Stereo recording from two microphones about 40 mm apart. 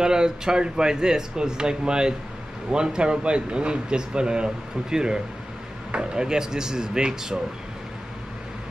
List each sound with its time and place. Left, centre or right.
0.0 s speech: centre